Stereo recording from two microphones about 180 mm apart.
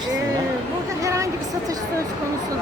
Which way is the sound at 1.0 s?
15° right (ahead or behind).